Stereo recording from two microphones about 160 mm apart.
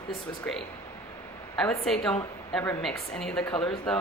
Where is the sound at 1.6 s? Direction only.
5° left (ahead or behind).